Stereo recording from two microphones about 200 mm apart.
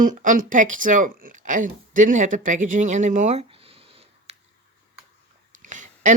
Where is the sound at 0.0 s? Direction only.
40° right (ahead or behind).